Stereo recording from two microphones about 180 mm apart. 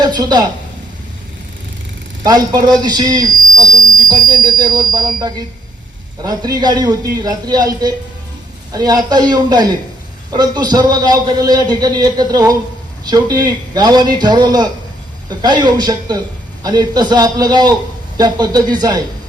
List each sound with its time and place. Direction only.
0.0 s a woman's voice: 25° right (ahead or behind)
2.2 s a man's voice: 20° right (ahead or behind)